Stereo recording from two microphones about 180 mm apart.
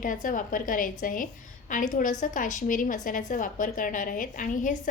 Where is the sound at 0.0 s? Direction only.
45° left (ahead or behind).